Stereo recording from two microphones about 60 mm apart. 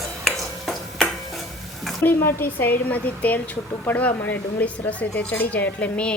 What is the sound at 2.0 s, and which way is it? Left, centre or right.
A woman's voice, left.